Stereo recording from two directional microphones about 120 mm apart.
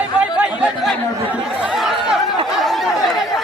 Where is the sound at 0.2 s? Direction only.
10° right (ahead or behind).